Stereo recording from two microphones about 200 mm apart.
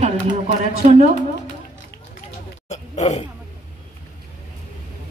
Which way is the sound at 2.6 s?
35° left (ahead or behind).